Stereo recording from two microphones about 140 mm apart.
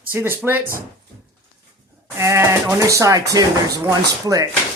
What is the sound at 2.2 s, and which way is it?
Speech, 20° right (ahead or behind).